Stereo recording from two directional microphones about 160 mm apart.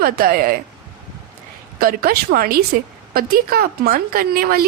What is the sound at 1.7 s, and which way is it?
Speech, 65° right (ahead or behind).